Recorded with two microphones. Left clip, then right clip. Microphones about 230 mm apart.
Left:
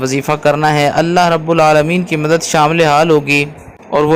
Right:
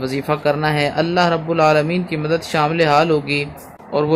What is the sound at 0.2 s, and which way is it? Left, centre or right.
A man's voice, centre.